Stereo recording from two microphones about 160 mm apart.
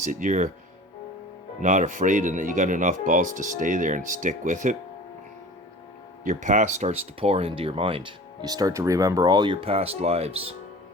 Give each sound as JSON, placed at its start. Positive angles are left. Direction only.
{"t": 0.1, "sound": "speech", "side_deg": -55}
{"t": 1.6, "sound": "speech", "side_deg": -50}
{"t": 6.2, "sound": "speech", "side_deg": -50}